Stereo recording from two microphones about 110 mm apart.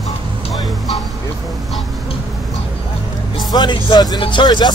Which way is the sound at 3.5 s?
40° left (ahead or behind).